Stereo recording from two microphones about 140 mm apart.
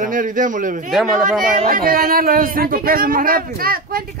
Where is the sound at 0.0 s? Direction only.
70° right (ahead or behind).